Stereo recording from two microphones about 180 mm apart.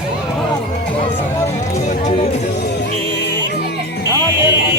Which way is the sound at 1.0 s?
15° left (ahead or behind).